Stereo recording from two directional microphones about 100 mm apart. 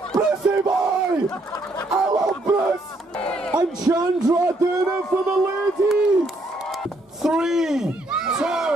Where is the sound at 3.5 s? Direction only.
40° right (ahead or behind).